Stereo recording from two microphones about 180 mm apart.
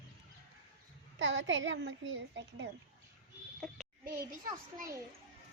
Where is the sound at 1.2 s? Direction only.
90° right.